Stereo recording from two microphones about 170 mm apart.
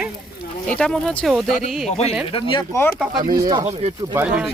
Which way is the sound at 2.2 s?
30° left (ahead or behind).